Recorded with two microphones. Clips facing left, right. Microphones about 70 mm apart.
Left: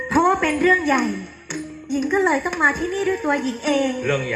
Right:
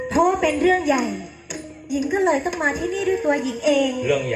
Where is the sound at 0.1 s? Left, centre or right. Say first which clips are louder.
Left 1 dB; left.